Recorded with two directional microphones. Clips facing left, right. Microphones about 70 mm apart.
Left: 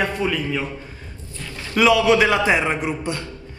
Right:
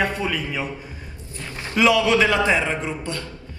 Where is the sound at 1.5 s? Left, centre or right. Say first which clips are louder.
Left 1 dB; right.